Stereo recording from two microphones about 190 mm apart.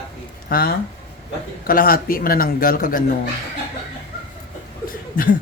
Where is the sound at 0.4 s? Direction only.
50° left (ahead or behind).